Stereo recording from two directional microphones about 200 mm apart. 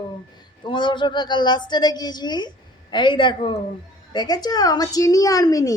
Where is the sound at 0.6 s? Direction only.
25° left (ahead or behind).